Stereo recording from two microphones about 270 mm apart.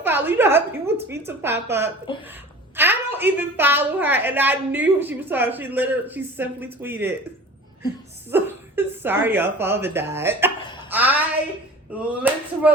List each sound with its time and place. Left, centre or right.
0.0 s a woman's voice: centre
2.1 s a woman's voice: centre
2.7 s a woman's voice: centre
8.3 s a woman's voice: centre
10.8 s a sound: centre
11.9 s speech: centre